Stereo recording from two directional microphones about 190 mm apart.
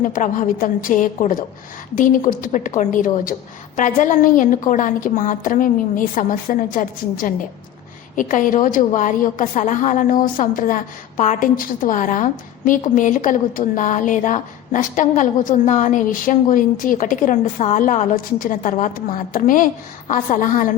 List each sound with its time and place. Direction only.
0.0 s a woman's voice: 45° left (ahead or behind)